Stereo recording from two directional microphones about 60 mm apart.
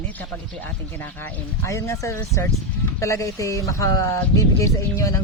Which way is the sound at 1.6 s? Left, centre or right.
Left.